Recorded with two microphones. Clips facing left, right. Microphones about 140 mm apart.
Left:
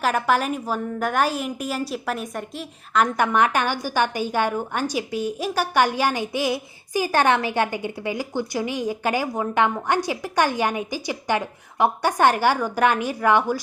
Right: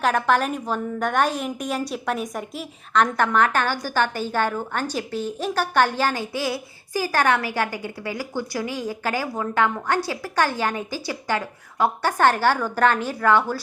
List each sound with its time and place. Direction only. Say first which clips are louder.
0.0 s a woman's voice: right 1 dB; 5° left (ahead or behind)